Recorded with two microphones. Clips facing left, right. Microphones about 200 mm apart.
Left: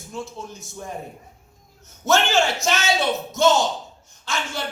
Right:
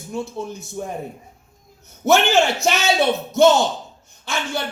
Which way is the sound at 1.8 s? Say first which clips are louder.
Right 4 dB; 60° right (ahead or behind).